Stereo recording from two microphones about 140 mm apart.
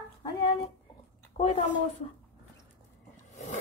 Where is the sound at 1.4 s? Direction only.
50° left (ahead or behind).